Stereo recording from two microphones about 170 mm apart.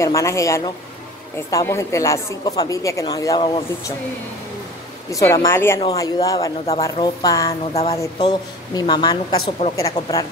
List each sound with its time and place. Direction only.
0.0 s a woman's voice: 20° left (ahead or behind)
5.1 s a woman's voice: 15° left (ahead or behind)
7.7 s speech: 35° left (ahead or behind)
8.0 s a woman's voice: 25° left (ahead or behind)
9.6 s speech: 40° left (ahead or behind)